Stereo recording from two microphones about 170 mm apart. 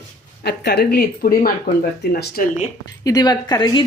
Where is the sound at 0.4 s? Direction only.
75° left (ahead or behind); by 1.8 s 50° left (ahead or behind).